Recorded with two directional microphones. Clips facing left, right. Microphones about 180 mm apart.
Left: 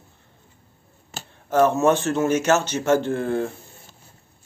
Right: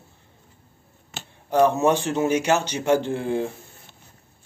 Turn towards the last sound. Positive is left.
turn(degrees=-15)  # may be behind; listen again after turning